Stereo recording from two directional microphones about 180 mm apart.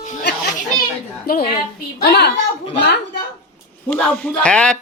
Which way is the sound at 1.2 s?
55° left (ahead or behind).